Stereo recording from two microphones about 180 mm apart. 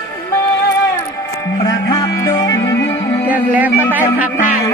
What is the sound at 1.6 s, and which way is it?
Music, 20° left (ahead or behind).